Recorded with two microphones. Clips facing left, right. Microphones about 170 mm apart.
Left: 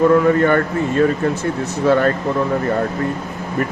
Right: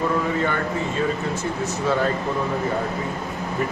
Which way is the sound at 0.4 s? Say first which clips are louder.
Left 8 dB; 55° left (ahead or behind).